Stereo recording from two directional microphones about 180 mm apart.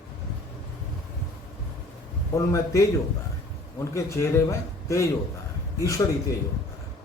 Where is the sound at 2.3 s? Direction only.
15° left (ahead or behind).